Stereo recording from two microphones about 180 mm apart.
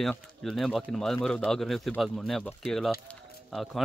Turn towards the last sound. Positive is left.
turn(degrees=0)  # may be behind; listen again after turning